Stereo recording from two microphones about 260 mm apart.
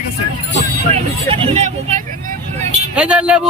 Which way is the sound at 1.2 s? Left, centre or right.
Right.